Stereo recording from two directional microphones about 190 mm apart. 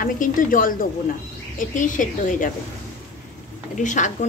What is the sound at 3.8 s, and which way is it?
Speech, 40° left (ahead or behind).